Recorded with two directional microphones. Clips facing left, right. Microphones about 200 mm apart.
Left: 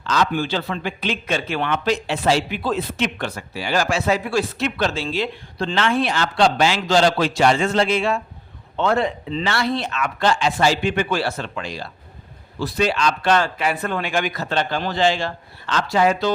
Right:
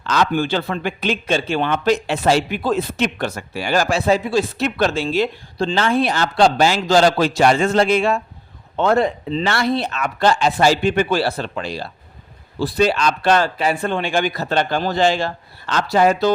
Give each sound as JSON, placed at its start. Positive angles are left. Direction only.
{"t": 0.0, "sound": "speech", "side_deg": -55}
{"t": 1.1, "sound": "speech", "side_deg": -30}
{"t": 1.7, "sound": "speech", "side_deg": -45}
{"t": 4.2, "sound": "speech", "side_deg": -20}
{"t": 4.5, "sound": "speech", "side_deg": -45}
{"t": 5.5, "sound": "a man's voice", "side_deg": -30}
{"t": 9.7, "sound": "a man's voice", "side_deg": -40}
{"t": 14.5, "sound": "speech", "side_deg": -45}